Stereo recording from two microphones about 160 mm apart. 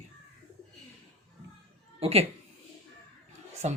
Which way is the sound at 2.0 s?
40° right (ahead or behind).